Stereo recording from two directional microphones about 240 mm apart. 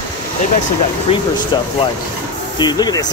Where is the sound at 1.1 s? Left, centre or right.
Left.